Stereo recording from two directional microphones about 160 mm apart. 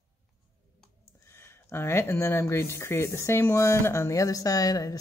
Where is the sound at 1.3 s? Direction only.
15° left (ahead or behind).